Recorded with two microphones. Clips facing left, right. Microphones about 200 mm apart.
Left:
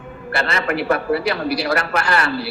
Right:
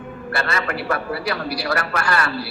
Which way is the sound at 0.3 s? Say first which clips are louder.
Left 3 dB; 20° left (ahead or behind).